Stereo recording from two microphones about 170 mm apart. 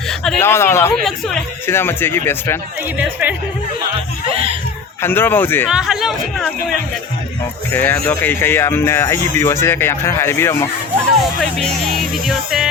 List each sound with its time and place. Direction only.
0.3 s speech: 15° left (ahead or behind)
1.0 s speech: 5° left (ahead or behind)
3.0 s speech: 10° right (ahead or behind)
5.0 s speech: 10° left (ahead or behind)
5.6 s speech: 5° right (ahead or behind)
7.7 s speech: 15° left (ahead or behind)
11.3 s speech: centre (ahead or behind)